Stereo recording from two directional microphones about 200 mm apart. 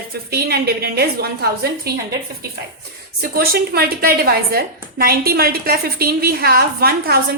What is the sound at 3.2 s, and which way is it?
A woman's voice, 50° right (ahead or behind).